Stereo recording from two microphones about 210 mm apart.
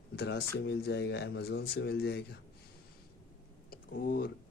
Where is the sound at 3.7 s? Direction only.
45° left (ahead or behind).